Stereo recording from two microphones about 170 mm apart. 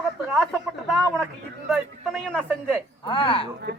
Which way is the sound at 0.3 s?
Centre (ahead or behind).